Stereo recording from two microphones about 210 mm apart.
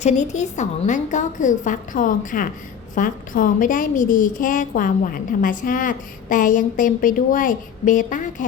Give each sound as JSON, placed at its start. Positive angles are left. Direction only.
{"t": 0.0, "sound": "a woman's voice", "side_deg": 35}